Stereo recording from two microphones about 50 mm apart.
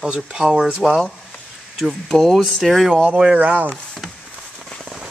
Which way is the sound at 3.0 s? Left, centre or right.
Right.